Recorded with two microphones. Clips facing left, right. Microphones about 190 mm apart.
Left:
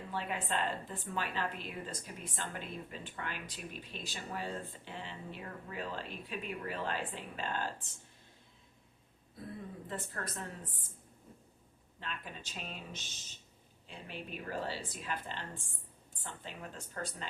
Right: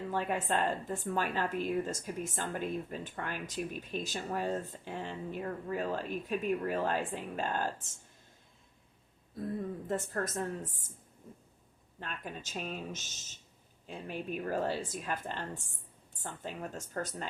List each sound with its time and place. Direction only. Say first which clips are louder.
0.1 s a woman's voice: right 4 dB; 45° right (ahead or behind)
9.8 s a woman's voice: right 6 dB; 45° right (ahead or behind)
11.9 s a woman's voice: right 3 dB; 45° right (ahead or behind)